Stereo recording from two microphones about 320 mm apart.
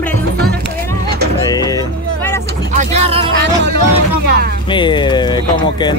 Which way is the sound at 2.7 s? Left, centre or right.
Centre.